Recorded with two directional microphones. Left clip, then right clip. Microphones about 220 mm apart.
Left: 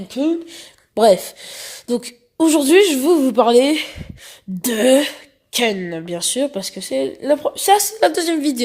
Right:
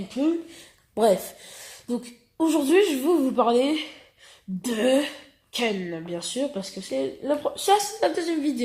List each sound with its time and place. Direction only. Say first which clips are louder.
0.9 s speech: left 8 dB; 40° left (ahead or behind)